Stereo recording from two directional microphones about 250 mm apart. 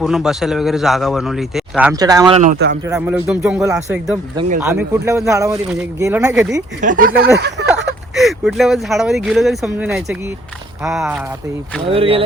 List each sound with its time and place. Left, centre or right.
0.0 s a man's voice: centre
2.4 s speech: right
2.8 s speech: centre
6.8 s speech: right
7.3 s a sound: right
8.1 s a man's voice: centre
11.9 s speech: right